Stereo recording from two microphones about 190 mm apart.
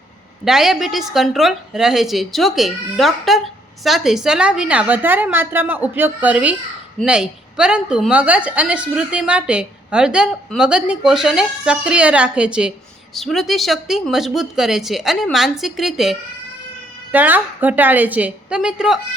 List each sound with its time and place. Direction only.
0.4 s a woman's voice: centre (ahead or behind)